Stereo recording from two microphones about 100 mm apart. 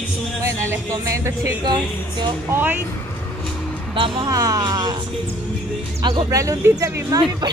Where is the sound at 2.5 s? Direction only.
20° right (ahead or behind).